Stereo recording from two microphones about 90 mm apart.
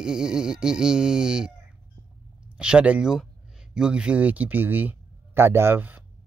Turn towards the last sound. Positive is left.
turn(degrees=-20)  # may be behind; listen again after turning